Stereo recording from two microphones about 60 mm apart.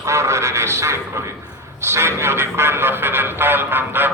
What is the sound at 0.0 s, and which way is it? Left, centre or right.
Speech, right.